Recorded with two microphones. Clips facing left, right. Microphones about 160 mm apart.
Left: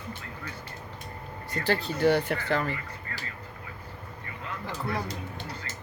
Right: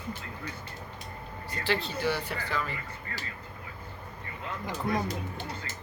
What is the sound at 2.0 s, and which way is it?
Speech, 55° left (ahead or behind).